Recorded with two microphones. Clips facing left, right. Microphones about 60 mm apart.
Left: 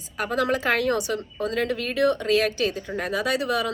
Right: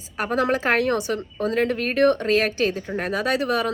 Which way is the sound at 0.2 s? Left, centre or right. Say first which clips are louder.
Right 2 dB; right.